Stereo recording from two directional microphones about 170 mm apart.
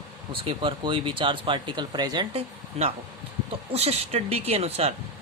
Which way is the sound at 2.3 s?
35° right (ahead or behind).